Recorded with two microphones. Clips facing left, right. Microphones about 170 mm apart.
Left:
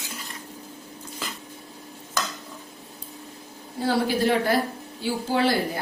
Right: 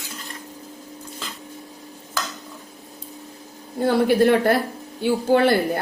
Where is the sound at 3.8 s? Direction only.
55° right (ahead or behind).